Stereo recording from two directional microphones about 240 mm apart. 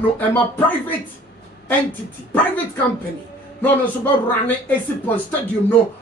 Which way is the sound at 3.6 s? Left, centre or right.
Centre.